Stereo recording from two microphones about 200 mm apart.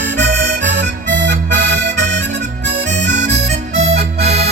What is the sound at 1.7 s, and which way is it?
Music, 60° right (ahead or behind).